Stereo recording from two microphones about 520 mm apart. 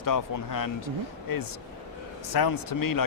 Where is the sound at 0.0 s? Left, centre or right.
Left.